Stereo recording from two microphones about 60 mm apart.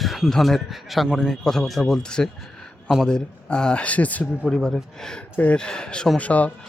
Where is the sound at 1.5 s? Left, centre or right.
Centre; by 4.3 s left.